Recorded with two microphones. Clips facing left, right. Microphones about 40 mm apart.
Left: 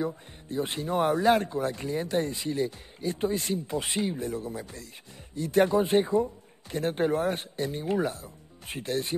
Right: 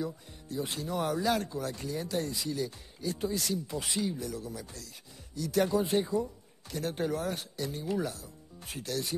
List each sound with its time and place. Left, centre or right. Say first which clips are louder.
0.0 s speech: left 5 dB; left